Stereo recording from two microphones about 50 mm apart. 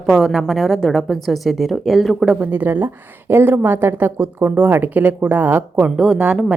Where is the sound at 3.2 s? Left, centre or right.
Right.